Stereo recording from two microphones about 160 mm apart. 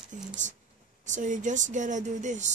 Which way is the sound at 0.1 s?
50° right (ahead or behind).